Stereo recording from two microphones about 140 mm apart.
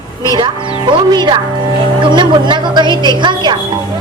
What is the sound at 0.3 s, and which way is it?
A woman's voice, 35° right (ahead or behind).